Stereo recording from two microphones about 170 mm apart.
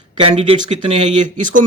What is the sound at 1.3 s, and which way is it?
Speech, 50° right (ahead or behind).